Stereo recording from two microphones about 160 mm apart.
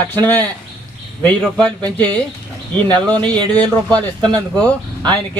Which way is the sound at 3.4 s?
30° right (ahead or behind).